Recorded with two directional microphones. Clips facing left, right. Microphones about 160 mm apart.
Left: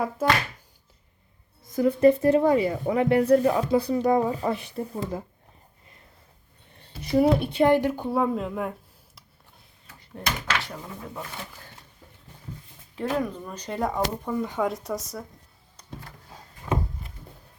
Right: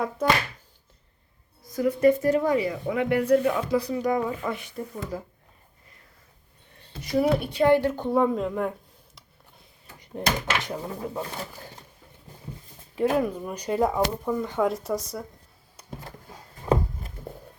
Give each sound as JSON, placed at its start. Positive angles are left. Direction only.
{"t": 1.6, "sound": "speech", "side_deg": 25}
{"t": 7.0, "sound": "speech", "side_deg": 25}
{"t": 10.4, "sound": "speech", "side_deg": -20}
{"t": 10.8, "sound": "speech", "side_deg": -35}
{"t": 13.0, "sound": "speech", "side_deg": -10}
{"t": 16.7, "sound": "a sound", "side_deg": -35}